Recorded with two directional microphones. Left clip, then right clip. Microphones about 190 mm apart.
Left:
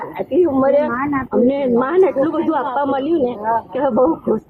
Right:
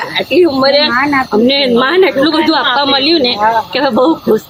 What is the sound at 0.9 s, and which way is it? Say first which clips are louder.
Speech: right 9 dB; 90° right.